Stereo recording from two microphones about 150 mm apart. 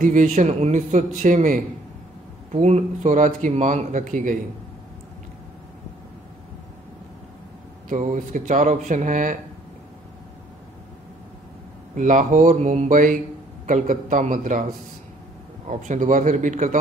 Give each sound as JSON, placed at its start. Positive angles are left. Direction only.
{"t": 0.0, "sound": "a man's voice", "side_deg": -55}
{"t": 7.9, "sound": "a man's voice", "side_deg": -55}
{"t": 11.9, "sound": "a man's voice", "side_deg": -60}